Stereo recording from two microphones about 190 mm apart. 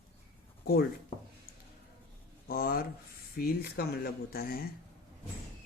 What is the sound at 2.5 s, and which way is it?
Speech, 50° left (ahead or behind).